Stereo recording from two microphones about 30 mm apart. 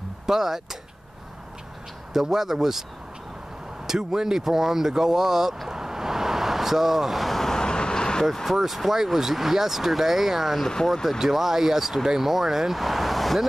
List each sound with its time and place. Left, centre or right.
0.3 s speech: centre
2.1 s speech: centre
3.8 s speech: centre
5.7 s vehicle: centre
7.4 s vehicle: left
8.5 s speech: centre